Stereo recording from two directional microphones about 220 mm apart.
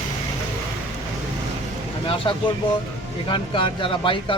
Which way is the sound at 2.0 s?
25° left (ahead or behind).